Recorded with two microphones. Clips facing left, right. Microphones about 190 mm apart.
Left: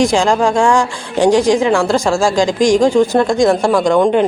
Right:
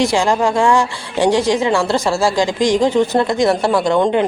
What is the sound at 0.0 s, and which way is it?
Speech, 15° left (ahead or behind).